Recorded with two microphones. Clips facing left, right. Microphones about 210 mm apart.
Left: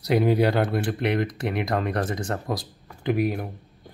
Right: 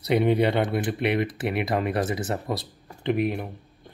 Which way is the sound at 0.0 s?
Centre (ahead or behind).